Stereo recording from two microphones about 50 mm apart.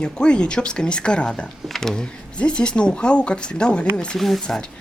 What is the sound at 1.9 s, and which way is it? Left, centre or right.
Speech, centre.